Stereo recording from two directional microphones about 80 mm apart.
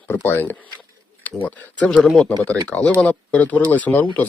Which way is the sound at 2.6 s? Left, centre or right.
Centre.